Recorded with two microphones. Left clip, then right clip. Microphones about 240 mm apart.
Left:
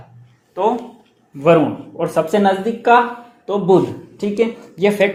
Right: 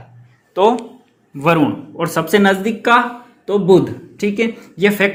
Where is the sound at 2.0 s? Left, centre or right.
Right.